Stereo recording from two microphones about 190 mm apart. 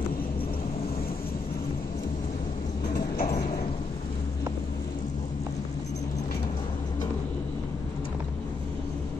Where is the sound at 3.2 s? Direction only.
50° left (ahead or behind).